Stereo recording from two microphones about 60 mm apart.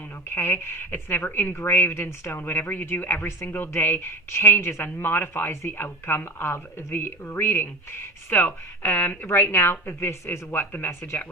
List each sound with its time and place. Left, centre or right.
0.3 s a woman's voice: left